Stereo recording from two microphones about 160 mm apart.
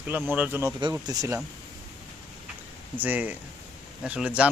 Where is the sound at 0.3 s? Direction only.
10° right (ahead or behind).